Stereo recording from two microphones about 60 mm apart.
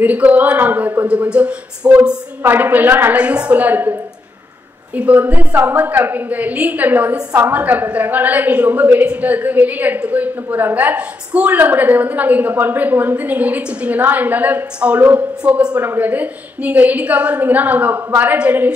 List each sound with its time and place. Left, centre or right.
0.0 s a woman's voice: right
1.0 s a woman's voice: right
3.2 s a woman's voice: right
4.9 s a woman's voice: right
15.4 s a woman's voice: centre
15.8 s a woman's voice: right